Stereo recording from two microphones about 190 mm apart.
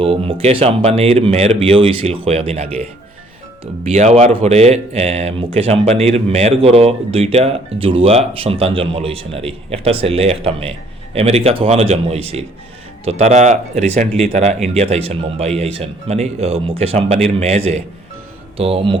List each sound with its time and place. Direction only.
0.0 s speech: 30° right (ahead or behind)
3.9 s speech: 35° right (ahead or behind)